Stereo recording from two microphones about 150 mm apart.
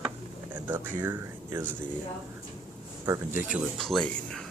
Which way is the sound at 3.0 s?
20° right (ahead or behind).